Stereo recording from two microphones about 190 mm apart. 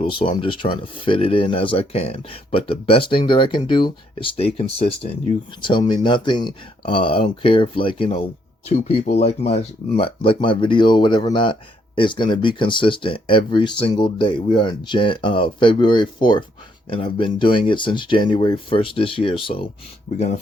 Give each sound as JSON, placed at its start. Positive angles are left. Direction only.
{"t": 0.0, "sound": "speech", "side_deg": 25}
{"t": 20.1, "sound": "speech", "side_deg": 40}